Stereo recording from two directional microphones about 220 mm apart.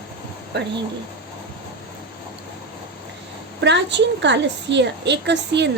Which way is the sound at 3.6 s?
50° right (ahead or behind).